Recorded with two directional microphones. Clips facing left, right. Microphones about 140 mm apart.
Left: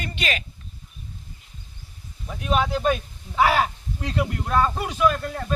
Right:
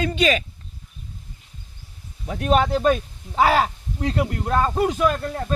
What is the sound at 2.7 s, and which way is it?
Speech, 40° right (ahead or behind).